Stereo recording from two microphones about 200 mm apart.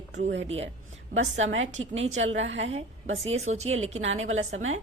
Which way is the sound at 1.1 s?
70° right (ahead or behind).